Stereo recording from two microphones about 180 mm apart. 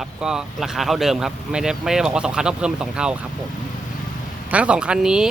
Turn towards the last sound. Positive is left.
turn(degrees=-5)  # may be behind; listen again after turning